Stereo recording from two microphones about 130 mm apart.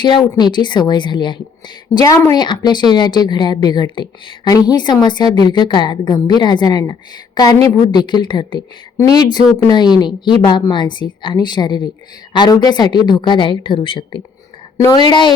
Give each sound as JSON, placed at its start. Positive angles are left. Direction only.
{"t": 0.0, "sound": "a woman's voice", "side_deg": 35}